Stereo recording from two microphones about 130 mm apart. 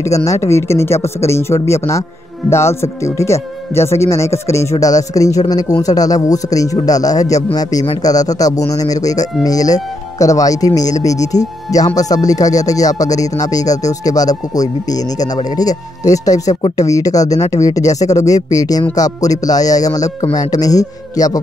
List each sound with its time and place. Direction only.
0.0 s speech: 25° left (ahead or behind)